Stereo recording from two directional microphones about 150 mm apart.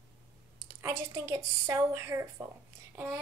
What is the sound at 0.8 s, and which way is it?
A woman's voice, 20° right (ahead or behind).